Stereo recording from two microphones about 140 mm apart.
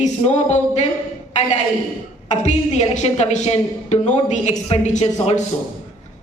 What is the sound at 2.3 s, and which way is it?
A woman's voice, 55° left (ahead or behind).